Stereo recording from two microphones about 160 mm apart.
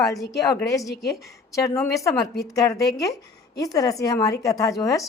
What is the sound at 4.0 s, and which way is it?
A woman's voice, 20° left (ahead or behind).